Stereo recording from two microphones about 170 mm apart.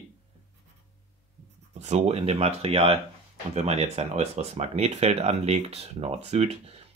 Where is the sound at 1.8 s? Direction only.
40° right (ahead or behind).